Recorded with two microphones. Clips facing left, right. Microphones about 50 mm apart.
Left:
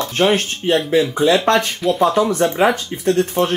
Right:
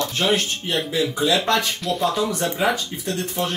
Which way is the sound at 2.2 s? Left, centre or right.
Left.